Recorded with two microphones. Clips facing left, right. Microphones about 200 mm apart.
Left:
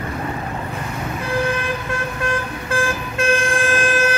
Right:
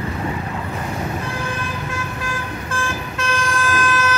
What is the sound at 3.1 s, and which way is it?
Vehicle, 55° left (ahead or behind).